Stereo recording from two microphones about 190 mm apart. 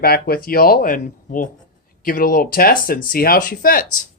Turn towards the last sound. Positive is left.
turn(degrees=50)  # may be behind; listen again after turning